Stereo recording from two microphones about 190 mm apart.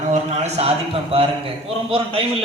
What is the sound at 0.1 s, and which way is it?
A man's voice, 35° right (ahead or behind).